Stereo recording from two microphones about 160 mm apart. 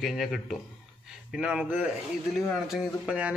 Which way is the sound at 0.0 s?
Centre (ahead or behind).